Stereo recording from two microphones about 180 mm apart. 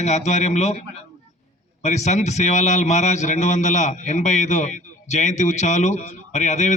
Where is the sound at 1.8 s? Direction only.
40° left (ahead or behind).